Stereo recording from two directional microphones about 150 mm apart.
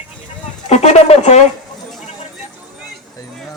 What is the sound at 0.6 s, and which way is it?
Speech, 45° left (ahead or behind).